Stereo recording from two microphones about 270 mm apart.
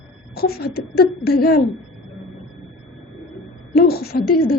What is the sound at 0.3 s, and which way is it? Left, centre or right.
A woman's voice, left.